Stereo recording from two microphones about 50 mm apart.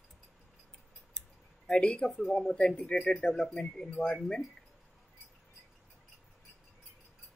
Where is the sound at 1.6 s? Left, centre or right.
Centre.